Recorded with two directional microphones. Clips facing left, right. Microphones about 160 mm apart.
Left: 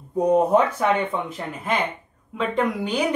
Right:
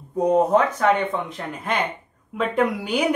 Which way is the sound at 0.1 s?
10° left (ahead or behind).